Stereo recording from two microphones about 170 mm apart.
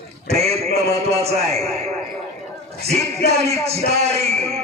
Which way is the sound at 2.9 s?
40° right (ahead or behind).